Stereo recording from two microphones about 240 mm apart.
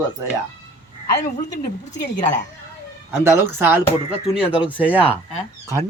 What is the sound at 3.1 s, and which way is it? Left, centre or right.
Speech, centre.